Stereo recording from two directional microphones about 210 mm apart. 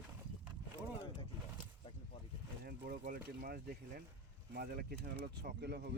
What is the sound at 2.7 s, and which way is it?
Speech, 45° right (ahead or behind).